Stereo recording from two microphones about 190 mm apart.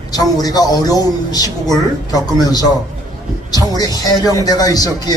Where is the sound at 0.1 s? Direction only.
20° left (ahead or behind).